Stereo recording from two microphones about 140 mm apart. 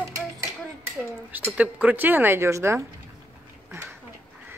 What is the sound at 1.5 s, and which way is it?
Speech, 10° right (ahead or behind).